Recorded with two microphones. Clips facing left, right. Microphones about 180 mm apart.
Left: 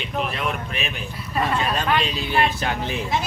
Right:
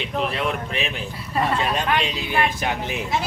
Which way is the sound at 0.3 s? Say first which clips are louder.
Right 2 dB; 30° right (ahead or behind).